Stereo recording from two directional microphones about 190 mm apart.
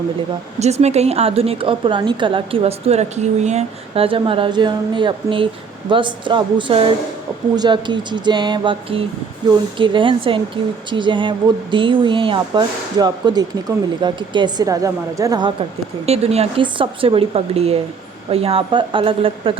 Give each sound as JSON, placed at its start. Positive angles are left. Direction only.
{"t": 0.6, "sound": "a woman's voice", "side_deg": -35}
{"t": 16.0, "sound": "a woman's voice", "side_deg": -35}